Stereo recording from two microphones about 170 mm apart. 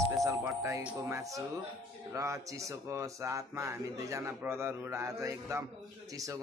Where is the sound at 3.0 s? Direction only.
15° right (ahead or behind).